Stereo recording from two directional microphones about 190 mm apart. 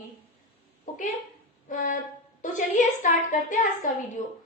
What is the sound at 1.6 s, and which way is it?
A woman's voice, 45° left (ahead or behind).